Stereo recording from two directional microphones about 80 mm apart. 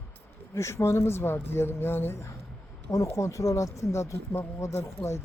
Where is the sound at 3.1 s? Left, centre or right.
Left.